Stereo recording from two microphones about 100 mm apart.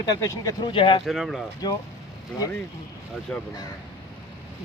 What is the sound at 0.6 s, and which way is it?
Speech, 60° left (ahead or behind).